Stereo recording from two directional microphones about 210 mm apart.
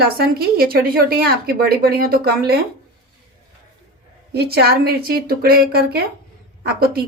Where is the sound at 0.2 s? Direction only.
45° right (ahead or behind).